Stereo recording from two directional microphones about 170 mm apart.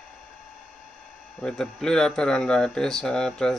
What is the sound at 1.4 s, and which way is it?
Speech, 5° left (ahead or behind).